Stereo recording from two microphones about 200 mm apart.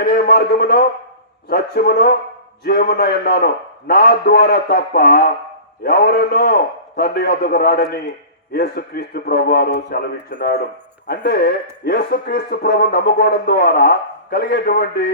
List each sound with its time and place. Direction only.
0.0 s speech: 50° left (ahead or behind)